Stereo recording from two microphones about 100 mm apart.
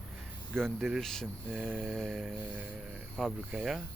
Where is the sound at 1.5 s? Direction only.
10° right (ahead or behind).